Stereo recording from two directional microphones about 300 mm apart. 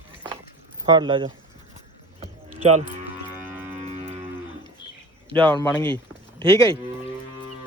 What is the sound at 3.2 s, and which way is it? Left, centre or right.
Music, centre.